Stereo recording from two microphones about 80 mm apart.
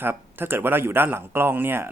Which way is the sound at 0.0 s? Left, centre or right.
Right.